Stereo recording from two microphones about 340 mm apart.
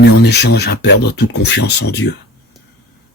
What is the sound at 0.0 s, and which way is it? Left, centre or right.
Speech, left.